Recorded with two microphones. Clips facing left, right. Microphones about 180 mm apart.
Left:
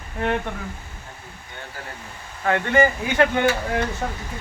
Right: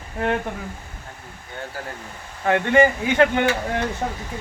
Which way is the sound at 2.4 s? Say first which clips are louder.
Right 2 dB; 20° right (ahead or behind).